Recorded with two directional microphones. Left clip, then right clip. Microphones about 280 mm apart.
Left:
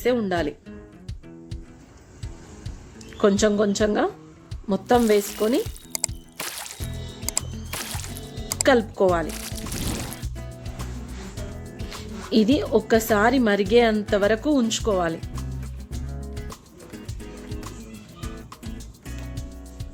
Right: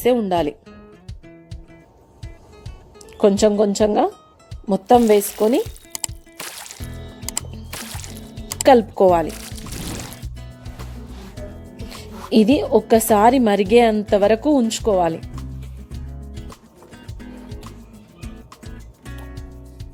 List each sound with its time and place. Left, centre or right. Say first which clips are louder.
0.0 s a woman's voice: right 5 dB; centre
3.2 s speech: right 5 dB; centre
4.9 s music: right 4 dB; centre
8.6 s a woman's voice: right 6 dB; centre
9.2 s music: right 2 dB; centre
12.2 s a woman's voice: right 5 dB; centre
15.9 s music: left 4 dB; centre